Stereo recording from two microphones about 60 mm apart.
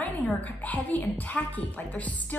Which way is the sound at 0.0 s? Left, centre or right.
Left.